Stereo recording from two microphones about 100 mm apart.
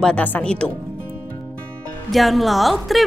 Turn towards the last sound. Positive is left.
turn(degrees=0)  # may be behind; listen again after turning